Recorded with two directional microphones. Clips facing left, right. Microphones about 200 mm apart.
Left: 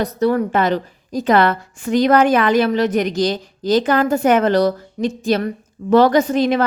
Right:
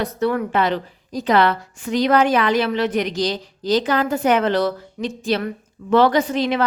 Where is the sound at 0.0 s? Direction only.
35° left (ahead or behind).